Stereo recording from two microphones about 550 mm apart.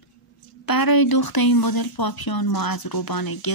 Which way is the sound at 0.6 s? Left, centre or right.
Left.